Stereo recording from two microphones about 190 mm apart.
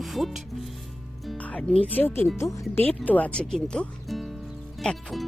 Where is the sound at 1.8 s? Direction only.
10° left (ahead or behind).